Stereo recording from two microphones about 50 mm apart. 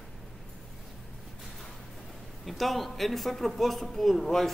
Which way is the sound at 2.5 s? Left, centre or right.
Centre.